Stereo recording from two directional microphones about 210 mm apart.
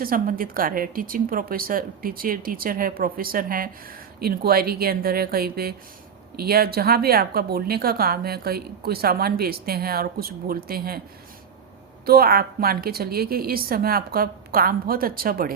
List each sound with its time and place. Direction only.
0.0 s a woman's voice: 40° right (ahead or behind)
12.0 s a woman's voice: 45° right (ahead or behind)